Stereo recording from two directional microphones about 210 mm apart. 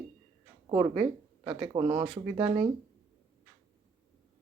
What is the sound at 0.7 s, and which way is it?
Speech, 20° right (ahead or behind).